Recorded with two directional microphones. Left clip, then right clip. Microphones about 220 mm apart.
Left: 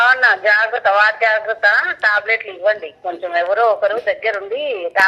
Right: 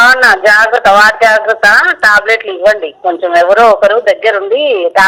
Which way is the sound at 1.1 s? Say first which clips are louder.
Right 9 dB; 50° right (ahead or behind).